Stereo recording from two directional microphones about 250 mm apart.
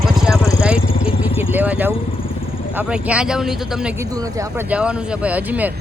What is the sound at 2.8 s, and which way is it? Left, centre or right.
Speech, centre.